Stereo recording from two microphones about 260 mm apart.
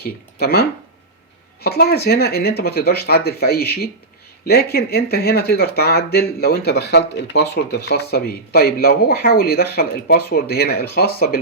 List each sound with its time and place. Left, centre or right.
0.0 s speech: left